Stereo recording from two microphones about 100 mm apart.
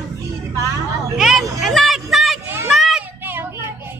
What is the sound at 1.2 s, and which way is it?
Hubbub, centre (ahead or behind).